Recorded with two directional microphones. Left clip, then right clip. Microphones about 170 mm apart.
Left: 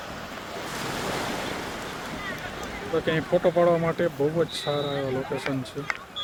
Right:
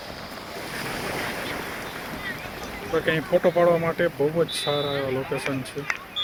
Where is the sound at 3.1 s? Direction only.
5° left (ahead or behind).